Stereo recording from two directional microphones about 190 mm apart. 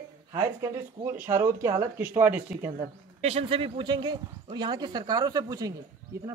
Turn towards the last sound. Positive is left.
turn(degrees=-20)  # may be behind; listen again after turning